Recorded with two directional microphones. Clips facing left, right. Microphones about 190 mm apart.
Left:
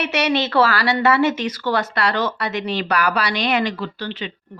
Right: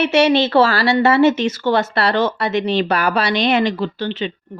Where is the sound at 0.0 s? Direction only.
25° right (ahead or behind).